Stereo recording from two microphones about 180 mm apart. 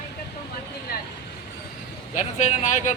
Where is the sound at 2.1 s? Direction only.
45° left (ahead or behind).